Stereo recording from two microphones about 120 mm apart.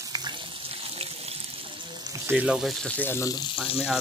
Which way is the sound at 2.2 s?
10° right (ahead or behind).